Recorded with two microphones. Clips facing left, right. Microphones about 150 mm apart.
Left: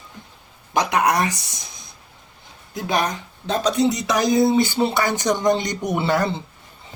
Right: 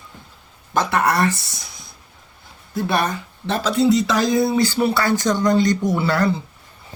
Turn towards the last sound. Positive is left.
turn(degrees=20)  # may be behind; listen again after turning